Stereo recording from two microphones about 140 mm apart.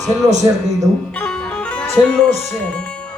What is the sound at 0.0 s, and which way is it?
Speech, centre (ahead or behind).